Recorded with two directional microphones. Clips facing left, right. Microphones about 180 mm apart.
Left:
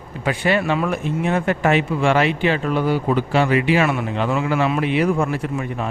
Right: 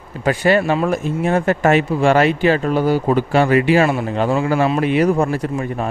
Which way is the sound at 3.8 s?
30° right (ahead or behind).